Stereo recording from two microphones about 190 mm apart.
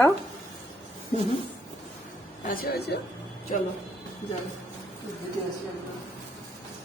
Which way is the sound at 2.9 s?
60° left (ahead or behind).